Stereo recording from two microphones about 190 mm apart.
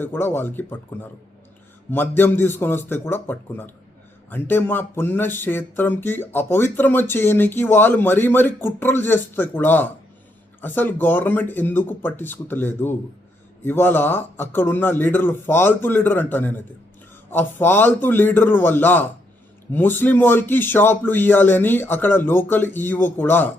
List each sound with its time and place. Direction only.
0.0 s speech: 10° left (ahead or behind)
1.9 s speech: 10° left (ahead or behind)